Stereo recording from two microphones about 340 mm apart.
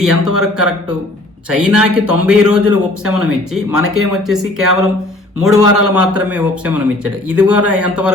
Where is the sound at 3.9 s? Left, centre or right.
Centre.